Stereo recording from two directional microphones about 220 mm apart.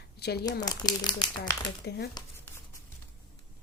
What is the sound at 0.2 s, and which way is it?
Speech, 45° left (ahead or behind).